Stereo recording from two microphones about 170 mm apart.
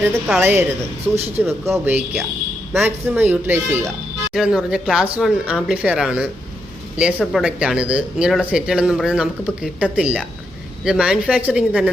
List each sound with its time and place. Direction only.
0.0 s speech: 5° right (ahead or behind)